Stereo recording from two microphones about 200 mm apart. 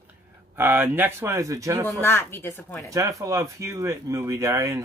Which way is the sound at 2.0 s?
10° left (ahead or behind).